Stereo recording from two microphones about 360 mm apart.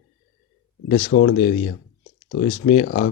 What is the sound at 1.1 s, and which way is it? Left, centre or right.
Speech, left.